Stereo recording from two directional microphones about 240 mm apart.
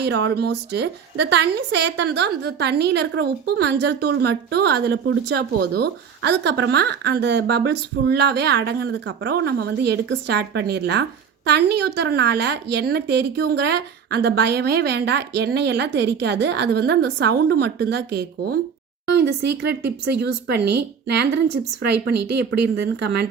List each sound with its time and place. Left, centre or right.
0.0 s a woman's voice: right